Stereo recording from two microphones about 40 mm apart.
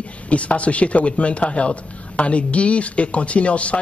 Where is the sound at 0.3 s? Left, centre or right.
Left.